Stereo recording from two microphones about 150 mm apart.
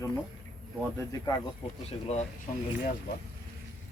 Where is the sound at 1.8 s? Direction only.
45° left (ahead or behind).